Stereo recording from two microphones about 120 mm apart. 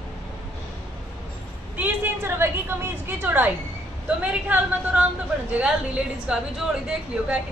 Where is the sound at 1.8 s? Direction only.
20° right (ahead or behind).